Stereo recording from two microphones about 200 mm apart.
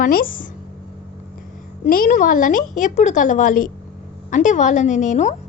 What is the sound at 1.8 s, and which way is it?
A woman's voice, 40° left (ahead or behind).